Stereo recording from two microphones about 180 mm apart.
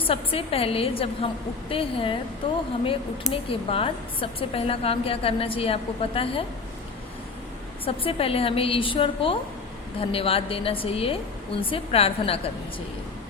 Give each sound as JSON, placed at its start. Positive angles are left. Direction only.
{"t": 0.1, "sound": "a woman's voice", "side_deg": 30}
{"t": 7.9, "sound": "a woman's voice", "side_deg": 30}